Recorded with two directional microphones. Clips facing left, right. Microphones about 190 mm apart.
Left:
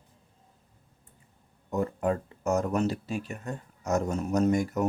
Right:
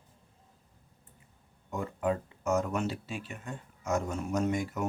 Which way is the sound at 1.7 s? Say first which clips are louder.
Left 4 dB; 45° left (ahead or behind).